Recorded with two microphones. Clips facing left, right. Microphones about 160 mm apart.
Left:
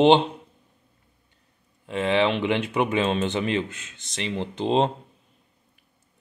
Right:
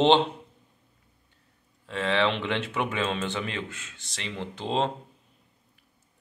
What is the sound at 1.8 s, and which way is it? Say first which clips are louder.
Speech: left 4 dB; 15° left (ahead or behind).